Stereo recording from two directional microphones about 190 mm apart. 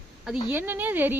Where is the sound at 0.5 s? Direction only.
10° right (ahead or behind).